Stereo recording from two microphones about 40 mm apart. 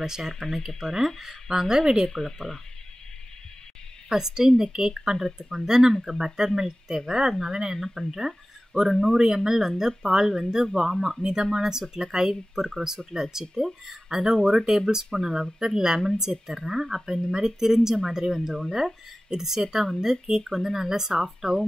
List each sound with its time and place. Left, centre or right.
0.0 s speech: centre
0.3 s speech: centre
2.0 s speech: centre
4.1 s speech: centre
11.5 s speech: centre
13.6 s speech: centre
14.0 s speech: centre
15.6 s speech: centre